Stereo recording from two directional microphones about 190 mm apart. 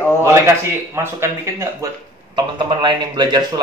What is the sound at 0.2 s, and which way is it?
A man's voice, 15° right (ahead or behind).